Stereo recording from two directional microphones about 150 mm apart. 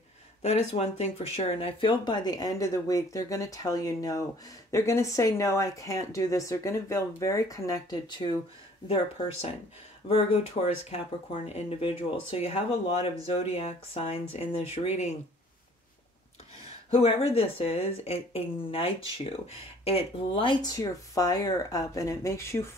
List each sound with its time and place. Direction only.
0.4 s a woman's voice: 45° left (ahead or behind)
16.9 s a woman's voice: 40° left (ahead or behind); by 22.7 s 20° left (ahead or behind)